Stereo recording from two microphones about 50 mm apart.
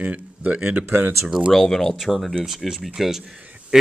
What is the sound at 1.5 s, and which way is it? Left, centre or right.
Speech, centre.